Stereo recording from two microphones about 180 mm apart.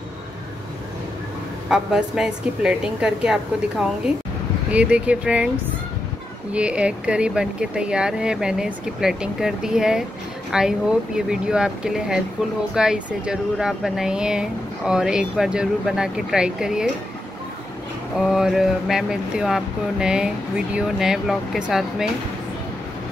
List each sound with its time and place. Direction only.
1.7 s speech: 5° right (ahead or behind)
6.5 s speech: 5° right (ahead or behind)
18.1 s speech: centre (ahead or behind)